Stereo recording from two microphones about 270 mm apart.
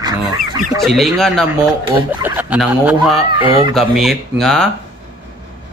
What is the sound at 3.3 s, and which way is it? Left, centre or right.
Speech, centre.